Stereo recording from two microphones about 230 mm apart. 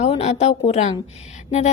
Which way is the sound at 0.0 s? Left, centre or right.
Left.